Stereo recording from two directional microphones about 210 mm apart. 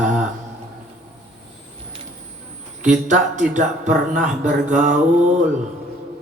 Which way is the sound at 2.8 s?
35° right (ahead or behind).